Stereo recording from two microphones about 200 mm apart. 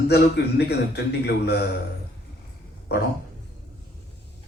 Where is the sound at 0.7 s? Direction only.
55° left (ahead or behind).